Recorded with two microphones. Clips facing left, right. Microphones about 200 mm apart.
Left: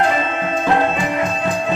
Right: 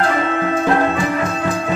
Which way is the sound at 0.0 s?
20° left (ahead or behind).